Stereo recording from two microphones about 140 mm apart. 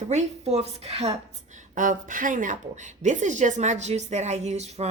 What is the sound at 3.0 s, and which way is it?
A woman's voice, 60° right (ahead or behind).